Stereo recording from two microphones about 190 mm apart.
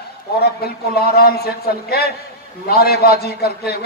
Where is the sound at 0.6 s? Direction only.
55° left (ahead or behind).